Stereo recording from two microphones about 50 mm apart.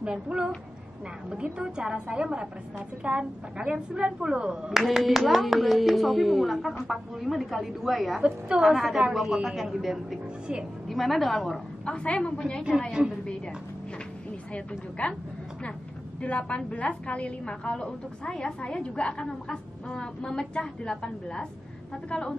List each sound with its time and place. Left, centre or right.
0.0 s a woman's voice: right; by 11.6 s centre
11.8 s a woman's voice: left
14.5 s a woman's voice: left
16.2 s a woman's voice: left